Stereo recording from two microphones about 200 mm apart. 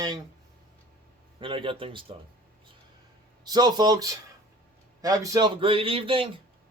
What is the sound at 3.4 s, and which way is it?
Speech, 20° right (ahead or behind).